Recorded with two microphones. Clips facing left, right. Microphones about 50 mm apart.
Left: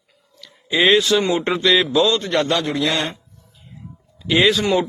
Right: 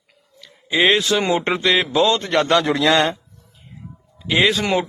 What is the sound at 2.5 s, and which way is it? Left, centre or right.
Speech, right.